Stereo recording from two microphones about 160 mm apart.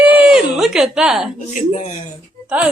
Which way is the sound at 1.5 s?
50° left (ahead or behind).